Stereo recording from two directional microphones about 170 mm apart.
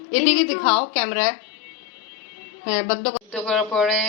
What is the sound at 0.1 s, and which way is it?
Speech, 50° left (ahead or behind).